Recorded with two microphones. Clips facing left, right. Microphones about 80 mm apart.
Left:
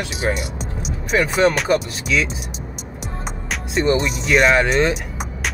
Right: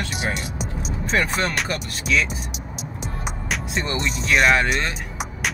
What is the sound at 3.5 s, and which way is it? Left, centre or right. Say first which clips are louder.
Music: left 8 dB; centre.